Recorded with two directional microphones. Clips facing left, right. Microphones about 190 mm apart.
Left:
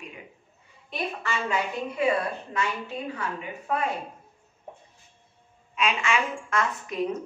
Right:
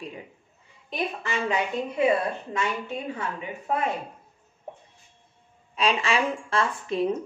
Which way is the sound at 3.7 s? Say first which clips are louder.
Right 1 dB; 25° right (ahead or behind).